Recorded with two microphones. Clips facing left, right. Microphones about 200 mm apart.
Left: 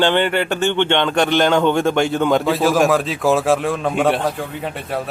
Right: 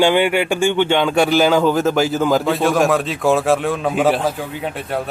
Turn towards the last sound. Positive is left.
turn(degrees=0)  # may be behind; listen again after turning